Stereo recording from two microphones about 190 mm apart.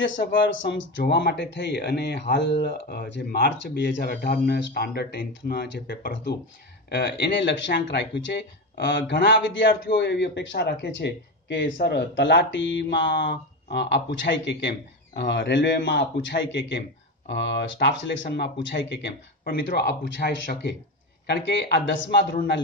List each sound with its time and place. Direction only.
0.2 s a man's voice: 70° left (ahead or behind)
1.1 s a man's voice: 60° left (ahead or behind)